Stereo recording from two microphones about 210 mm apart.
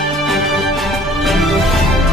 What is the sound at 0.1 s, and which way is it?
Music, centre (ahead or behind).